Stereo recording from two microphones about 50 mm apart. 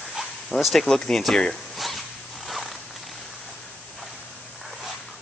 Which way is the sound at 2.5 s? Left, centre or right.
Centre.